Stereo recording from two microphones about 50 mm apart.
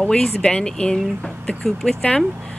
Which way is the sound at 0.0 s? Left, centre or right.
Centre.